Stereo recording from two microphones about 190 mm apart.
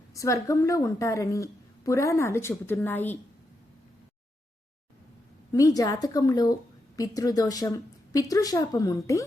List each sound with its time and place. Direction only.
0.1 s a woman's voice: 15° left (ahead or behind)
5.5 s a woman's voice: 15° left (ahead or behind)